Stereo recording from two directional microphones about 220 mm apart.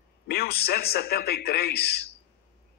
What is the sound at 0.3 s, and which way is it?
A man's voice, 45° left (ahead or behind).